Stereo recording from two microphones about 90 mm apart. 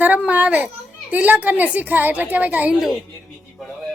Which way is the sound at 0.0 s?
20° right (ahead or behind).